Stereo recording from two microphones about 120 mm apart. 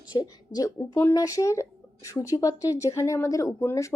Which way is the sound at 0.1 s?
35° left (ahead or behind).